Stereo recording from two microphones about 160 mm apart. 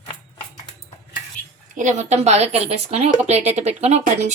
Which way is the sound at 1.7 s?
50° right (ahead or behind).